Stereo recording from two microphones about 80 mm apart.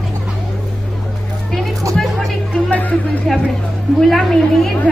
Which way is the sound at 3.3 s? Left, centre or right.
Centre.